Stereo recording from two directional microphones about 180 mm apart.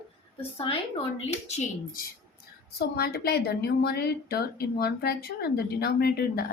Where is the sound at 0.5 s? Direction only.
30° left (ahead or behind).